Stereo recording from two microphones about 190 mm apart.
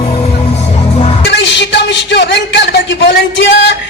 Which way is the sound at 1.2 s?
65° left (ahead or behind).